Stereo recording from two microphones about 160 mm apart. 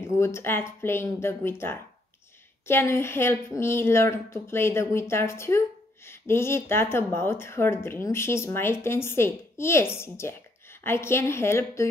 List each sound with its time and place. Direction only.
0.0 s speech: 15° left (ahead or behind)